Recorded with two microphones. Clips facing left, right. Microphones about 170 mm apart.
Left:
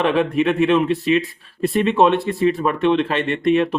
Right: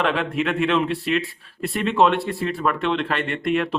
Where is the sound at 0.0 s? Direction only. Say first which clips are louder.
Left 5 dB; 15° left (ahead or behind).